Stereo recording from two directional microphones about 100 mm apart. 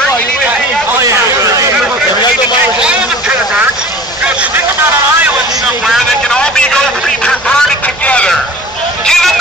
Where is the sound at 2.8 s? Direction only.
10° right (ahead or behind).